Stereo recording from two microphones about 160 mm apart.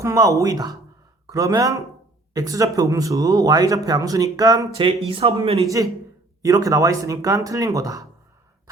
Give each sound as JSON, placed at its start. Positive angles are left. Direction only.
{"t": 0.0, "sound": "speech", "side_deg": -20}
{"t": 4.8, "sound": "speech", "side_deg": -35}
{"t": 5.5, "sound": "speech", "side_deg": -20}